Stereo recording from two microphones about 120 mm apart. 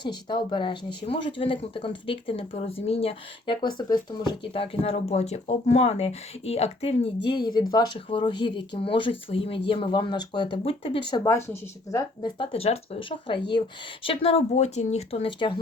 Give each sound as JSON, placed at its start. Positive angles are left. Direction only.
{"t": 0.0, "sound": "speech", "side_deg": 40}
{"t": 11.3, "sound": "speech", "side_deg": 25}
{"t": 12.2, "sound": "speech", "side_deg": 45}
{"t": 13.6, "sound": "speech", "side_deg": 50}